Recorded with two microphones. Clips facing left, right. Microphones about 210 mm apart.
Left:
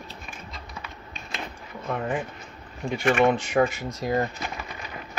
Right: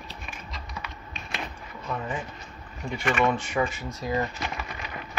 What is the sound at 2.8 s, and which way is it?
Speech, 45° left (ahead or behind).